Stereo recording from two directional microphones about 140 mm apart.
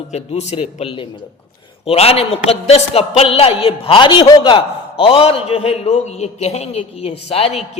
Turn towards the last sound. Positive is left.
turn(degrees=45)  # may be behind; listen again after turning